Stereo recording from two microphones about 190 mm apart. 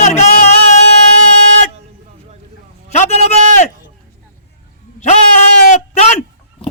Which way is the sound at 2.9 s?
35° left (ahead or behind).